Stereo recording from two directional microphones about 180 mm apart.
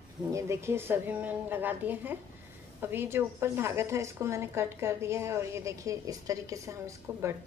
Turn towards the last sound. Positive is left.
turn(degrees=-15)  # may be behind; listen again after turning